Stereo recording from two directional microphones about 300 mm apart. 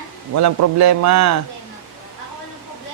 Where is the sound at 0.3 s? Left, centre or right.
Right.